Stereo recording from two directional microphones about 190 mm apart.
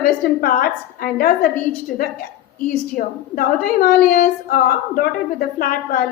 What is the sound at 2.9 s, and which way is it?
A woman's voice, 50° left (ahead or behind).